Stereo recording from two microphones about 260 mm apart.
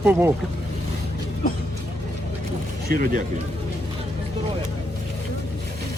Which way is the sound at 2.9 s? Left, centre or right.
Right.